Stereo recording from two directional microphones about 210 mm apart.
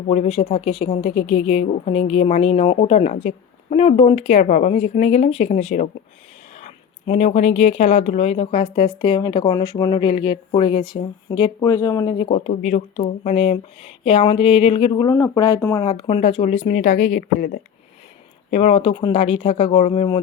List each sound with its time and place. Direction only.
0.1 s speech: 30° left (ahead or behind)
12.5 s speech: 35° left (ahead or behind)
15.1 s speech: 15° left (ahead or behind); by 17.6 s 40° left (ahead or behind)
18.5 s speech: 30° left (ahead or behind)